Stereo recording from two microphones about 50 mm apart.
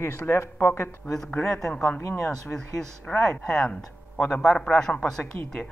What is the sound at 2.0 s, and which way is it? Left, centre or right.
Speech, left.